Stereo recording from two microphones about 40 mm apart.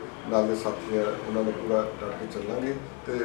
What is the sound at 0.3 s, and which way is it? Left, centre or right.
Speech, centre.